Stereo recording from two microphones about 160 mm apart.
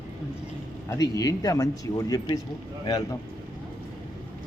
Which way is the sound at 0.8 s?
20° left (ahead or behind).